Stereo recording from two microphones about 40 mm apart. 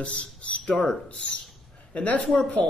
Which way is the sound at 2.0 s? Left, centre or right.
Left.